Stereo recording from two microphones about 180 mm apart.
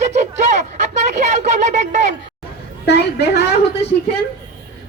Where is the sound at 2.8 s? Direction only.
65° left (ahead or behind).